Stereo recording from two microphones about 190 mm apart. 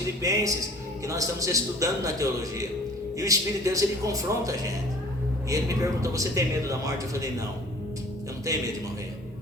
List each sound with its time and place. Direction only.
0.2 s a man's voice: 15° right (ahead or behind)